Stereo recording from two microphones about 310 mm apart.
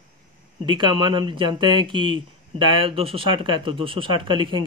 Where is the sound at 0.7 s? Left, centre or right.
Centre.